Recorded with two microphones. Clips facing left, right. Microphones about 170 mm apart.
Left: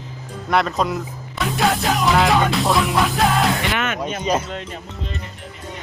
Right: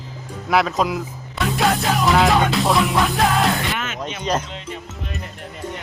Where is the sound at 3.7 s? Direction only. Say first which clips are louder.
Left 5 dB; 65° left (ahead or behind).